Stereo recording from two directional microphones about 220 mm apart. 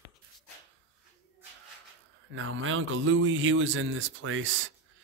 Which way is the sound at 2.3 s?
60° right (ahead or behind).